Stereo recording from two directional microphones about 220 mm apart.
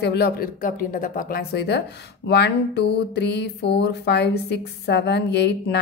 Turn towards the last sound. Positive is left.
turn(degrees=50)  # may be behind; listen again after turning